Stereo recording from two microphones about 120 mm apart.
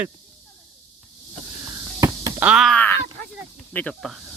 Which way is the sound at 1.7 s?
25° right (ahead or behind).